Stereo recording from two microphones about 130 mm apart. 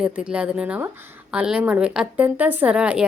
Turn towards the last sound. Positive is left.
turn(degrees=-10)  # may be behind; listen again after turning